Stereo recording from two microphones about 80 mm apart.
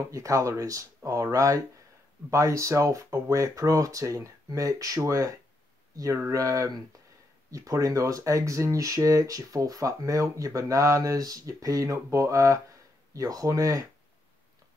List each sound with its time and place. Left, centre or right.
0.1 s speech: right